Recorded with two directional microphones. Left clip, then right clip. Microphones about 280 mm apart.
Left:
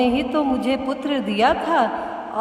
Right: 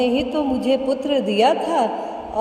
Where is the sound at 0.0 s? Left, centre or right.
Centre.